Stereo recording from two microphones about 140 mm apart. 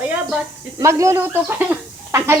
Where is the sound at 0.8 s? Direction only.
20° right (ahead or behind).